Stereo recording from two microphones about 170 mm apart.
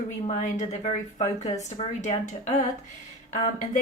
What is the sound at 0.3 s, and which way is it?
Speech, 45° left (ahead or behind).